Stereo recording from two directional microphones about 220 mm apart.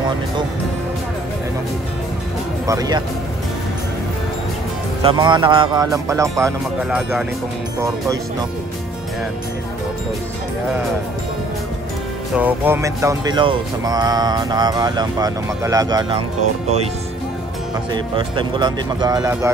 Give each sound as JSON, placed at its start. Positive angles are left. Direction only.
{"t": 2.6, "sound": "speech", "side_deg": -15}
{"t": 5.0, "sound": "speech", "side_deg": -20}
{"t": 7.0, "sound": "speech", "side_deg": -5}
{"t": 7.8, "sound": "speech", "side_deg": -15}
{"t": 12.4, "sound": "speech", "side_deg": -10}
{"t": 17.9, "sound": "speech", "side_deg": -20}